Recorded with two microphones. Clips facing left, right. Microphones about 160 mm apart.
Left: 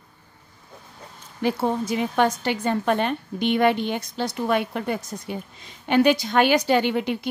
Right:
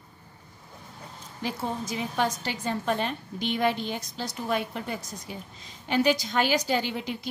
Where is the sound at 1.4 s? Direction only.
65° left (ahead or behind).